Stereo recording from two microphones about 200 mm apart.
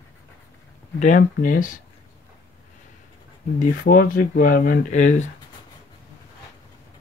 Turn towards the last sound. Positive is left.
turn(degrees=35)  # may be behind; listen again after turning